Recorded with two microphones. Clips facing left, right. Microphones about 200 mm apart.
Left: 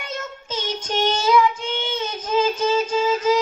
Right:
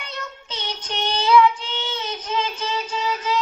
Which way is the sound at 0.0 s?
45° left (ahead or behind).